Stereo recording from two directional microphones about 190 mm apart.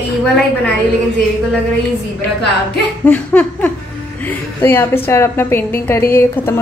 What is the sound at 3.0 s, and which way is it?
A woman's voice, 10° left (ahead or behind).